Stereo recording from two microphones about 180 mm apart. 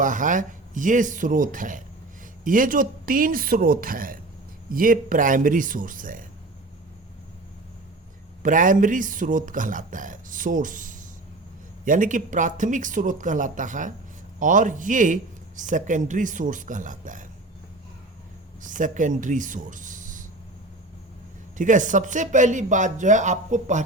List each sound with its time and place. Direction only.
0.0 s speech: 45° right (ahead or behind)
8.4 s speech: 45° right (ahead or behind)
18.6 s speech: 45° right (ahead or behind)
21.6 s speech: 45° right (ahead or behind)